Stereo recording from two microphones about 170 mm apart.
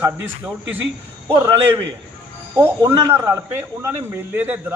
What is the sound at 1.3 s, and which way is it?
Speech, 15° right (ahead or behind).